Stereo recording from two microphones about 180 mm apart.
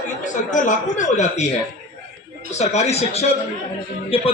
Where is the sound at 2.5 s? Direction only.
40° left (ahead or behind).